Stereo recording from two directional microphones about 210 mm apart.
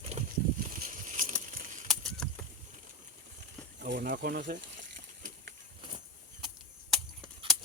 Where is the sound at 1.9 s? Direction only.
Centre (ahead or behind).